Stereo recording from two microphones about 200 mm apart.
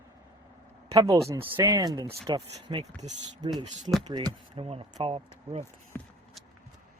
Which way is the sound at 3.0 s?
35° right (ahead or behind).